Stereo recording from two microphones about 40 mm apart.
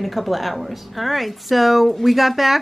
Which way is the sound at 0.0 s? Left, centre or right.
Centre.